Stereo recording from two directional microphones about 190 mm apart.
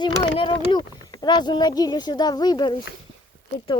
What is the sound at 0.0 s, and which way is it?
Speech, 25° left (ahead or behind).